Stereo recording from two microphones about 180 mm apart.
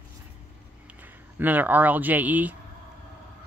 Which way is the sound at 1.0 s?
10° right (ahead or behind).